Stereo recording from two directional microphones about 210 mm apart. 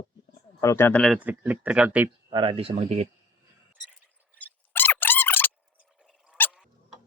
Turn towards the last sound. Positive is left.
turn(degrees=-5)  # may be behind; listen again after turning